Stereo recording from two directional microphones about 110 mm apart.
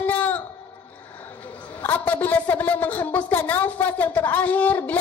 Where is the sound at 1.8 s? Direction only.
15° left (ahead or behind).